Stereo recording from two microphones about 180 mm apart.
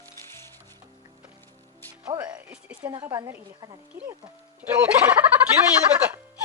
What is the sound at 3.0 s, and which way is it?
Speech, 15° right (ahead or behind).